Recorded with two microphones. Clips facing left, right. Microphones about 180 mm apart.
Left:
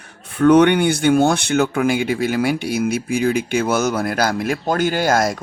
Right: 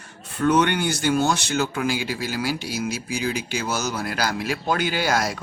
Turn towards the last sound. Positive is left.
turn(degrees=50)  # may be behind; listen again after turning